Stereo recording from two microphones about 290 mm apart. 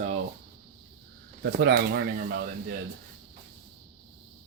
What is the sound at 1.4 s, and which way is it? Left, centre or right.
Speech, right.